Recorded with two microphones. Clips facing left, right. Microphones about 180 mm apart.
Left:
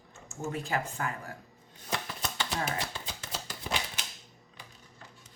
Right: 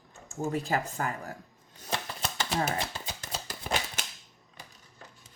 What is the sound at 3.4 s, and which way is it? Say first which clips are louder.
Scissors: right 3 dB; 45° right (ahead or behind).